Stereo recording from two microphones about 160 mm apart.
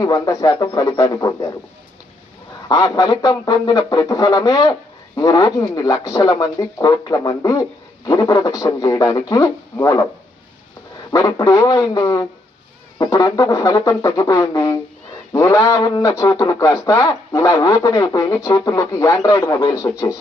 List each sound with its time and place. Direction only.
0.0 s speech: 20° left (ahead or behind)
2.6 s speech: 25° left (ahead or behind)
11.1 s speech: 20° left (ahead or behind)